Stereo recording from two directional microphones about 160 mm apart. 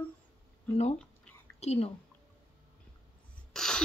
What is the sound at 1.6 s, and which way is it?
Speech, 40° left (ahead or behind).